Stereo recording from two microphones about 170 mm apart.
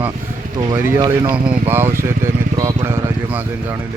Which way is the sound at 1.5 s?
10° right (ahead or behind).